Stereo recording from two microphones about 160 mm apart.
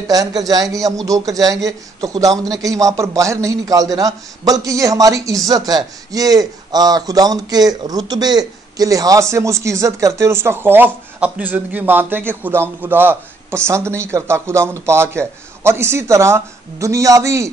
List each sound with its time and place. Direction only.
0.1 s a man's voice: 20° right (ahead or behind)